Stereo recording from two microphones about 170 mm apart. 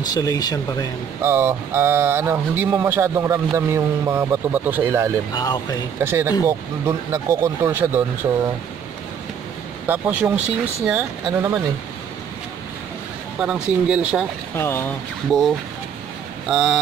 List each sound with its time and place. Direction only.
0.0 s speech: 20° left (ahead or behind)
1.2 s speech: 15° right (ahead or behind)
5.3 s speech: 20° left (ahead or behind)
5.9 s speech: 15° right (ahead or behind)
9.8 s speech: 10° right (ahead or behind)
13.4 s speech: 5° right (ahead or behind)
14.6 s speech: 15° left (ahead or behind)
16.4 s speech: 5° right (ahead or behind)